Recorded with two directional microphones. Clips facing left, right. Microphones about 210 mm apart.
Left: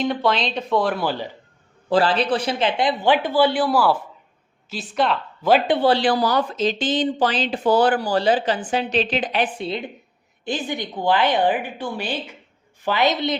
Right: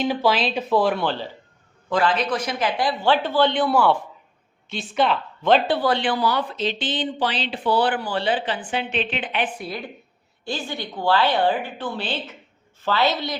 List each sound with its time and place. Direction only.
0.0 s speech: 5° right (ahead or behind)
1.9 s speech: 30° left (ahead or behind); by 5.6 s 5° left (ahead or behind)
5.6 s speech: 20° left (ahead or behind)
5.9 s speech: 40° left (ahead or behind)
9.6 s a woman's voice: 25° left (ahead or behind)